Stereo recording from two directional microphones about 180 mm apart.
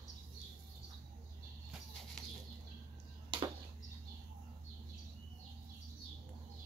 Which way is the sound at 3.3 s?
25° right (ahead or behind).